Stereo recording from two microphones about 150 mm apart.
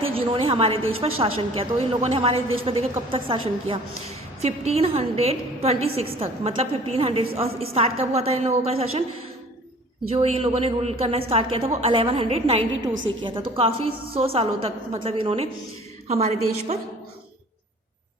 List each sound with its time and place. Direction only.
0.1 s a woman's voice: 40° right (ahead or behind)
10.1 s a woman's voice: 40° right (ahead or behind)